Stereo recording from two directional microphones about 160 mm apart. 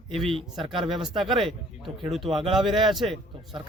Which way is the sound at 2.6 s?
30° right (ahead or behind).